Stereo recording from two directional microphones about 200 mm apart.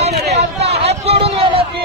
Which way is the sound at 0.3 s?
30° right (ahead or behind).